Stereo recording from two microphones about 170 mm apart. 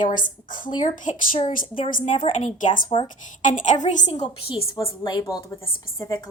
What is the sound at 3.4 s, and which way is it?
Speech, 50° left (ahead or behind).